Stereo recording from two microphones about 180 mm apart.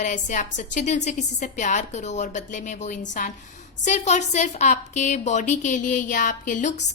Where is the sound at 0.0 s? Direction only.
45° left (ahead or behind).